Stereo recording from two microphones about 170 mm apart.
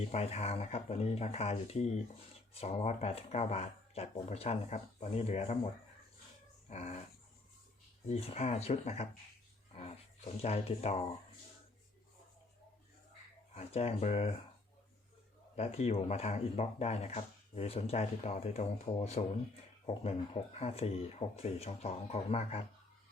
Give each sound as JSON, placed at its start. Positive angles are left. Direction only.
{"t": 0.0, "sound": "speech", "side_deg": 35}
{"t": 6.7, "sound": "speech", "side_deg": 40}
{"t": 8.0, "sound": "speech", "side_deg": 35}
{"t": 13.5, "sound": "speech", "side_deg": 35}
{"t": 15.5, "sound": "speech", "side_deg": 40}